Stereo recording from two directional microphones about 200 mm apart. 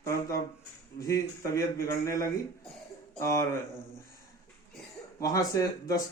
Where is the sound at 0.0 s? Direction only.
15° left (ahead or behind).